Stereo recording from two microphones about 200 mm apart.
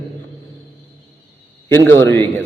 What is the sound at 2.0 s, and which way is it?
Speech, 10° left (ahead or behind).